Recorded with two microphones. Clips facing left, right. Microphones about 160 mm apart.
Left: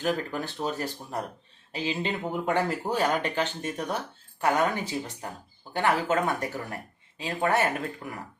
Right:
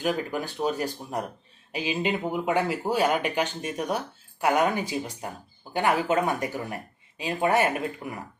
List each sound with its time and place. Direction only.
0.0 s speech: 15° right (ahead or behind)